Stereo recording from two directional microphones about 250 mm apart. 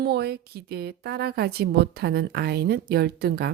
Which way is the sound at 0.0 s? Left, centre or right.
Right.